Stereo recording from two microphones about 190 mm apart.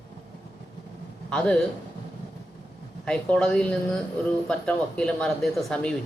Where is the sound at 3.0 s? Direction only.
5° left (ahead or behind).